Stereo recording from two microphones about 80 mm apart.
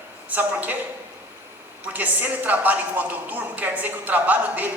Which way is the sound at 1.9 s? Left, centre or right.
Right.